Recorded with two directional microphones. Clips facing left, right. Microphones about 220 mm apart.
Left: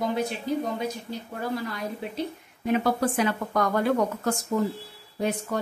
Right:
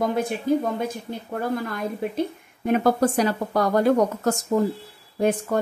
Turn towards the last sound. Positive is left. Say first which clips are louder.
# right 6 dB
turn(degrees=-50)  # may be behind; listen again after turning